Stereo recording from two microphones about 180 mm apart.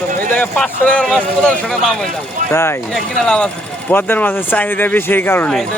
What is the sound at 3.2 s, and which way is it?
Speech, 5° left (ahead or behind).